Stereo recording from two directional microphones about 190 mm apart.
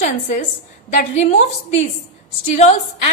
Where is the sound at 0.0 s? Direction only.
40° left (ahead or behind).